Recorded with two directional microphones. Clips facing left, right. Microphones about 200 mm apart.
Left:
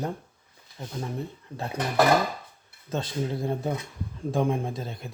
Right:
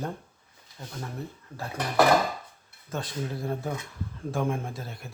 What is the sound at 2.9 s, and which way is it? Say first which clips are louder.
Speech: left 4 dB; 25° left (ahead or behind).